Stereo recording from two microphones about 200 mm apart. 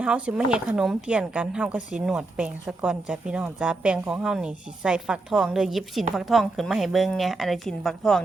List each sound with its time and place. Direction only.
0.0 s speech: 5° right (ahead or behind)